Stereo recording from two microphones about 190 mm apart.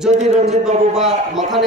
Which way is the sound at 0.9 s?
Centre (ahead or behind).